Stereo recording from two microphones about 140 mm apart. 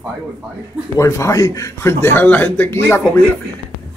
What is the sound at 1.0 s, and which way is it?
A man's voice, 20° left (ahead or behind).